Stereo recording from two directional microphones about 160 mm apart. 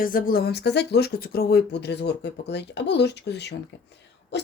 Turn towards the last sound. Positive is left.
turn(degrees=90)